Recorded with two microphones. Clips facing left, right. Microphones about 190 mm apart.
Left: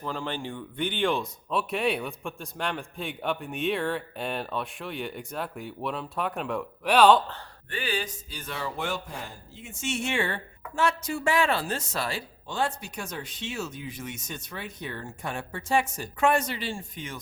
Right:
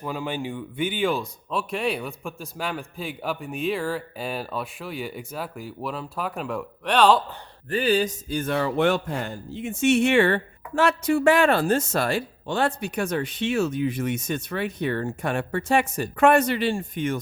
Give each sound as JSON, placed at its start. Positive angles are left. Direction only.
{"t": 0.0, "sound": "speech", "side_deg": -10}
{"t": 7.7, "sound": "speech", "side_deg": -40}